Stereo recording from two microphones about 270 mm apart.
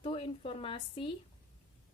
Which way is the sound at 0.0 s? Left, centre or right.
Centre.